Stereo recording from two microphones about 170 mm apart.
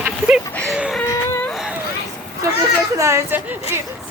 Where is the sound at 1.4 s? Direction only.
Centre (ahead or behind).